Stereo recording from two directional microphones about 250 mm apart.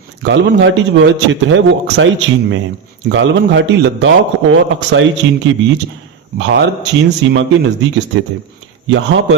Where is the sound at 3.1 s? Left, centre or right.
Right.